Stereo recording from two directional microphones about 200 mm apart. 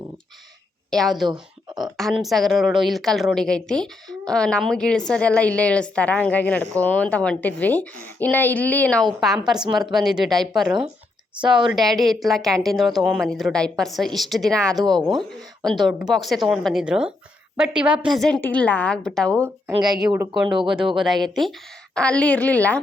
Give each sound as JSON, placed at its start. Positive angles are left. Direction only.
{"t": 0.9, "sound": "a woman's voice", "side_deg": 0}
{"t": 1.3, "sound": "a sound", "side_deg": -20}
{"t": 2.0, "sound": "a woman's voice", "side_deg": 0}
{"t": 19.6, "sound": "a woman's voice", "side_deg": -10}